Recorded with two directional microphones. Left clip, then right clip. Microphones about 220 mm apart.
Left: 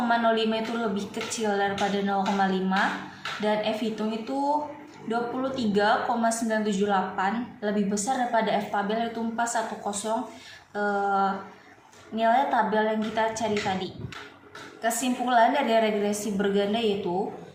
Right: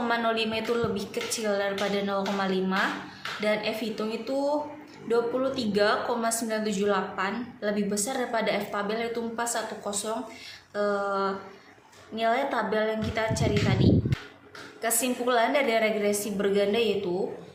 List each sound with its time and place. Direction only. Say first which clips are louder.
0.1 s speech: left 4 dB; 15° right (ahead or behind)
14.8 s speech: left 1 dB; 15° right (ahead or behind)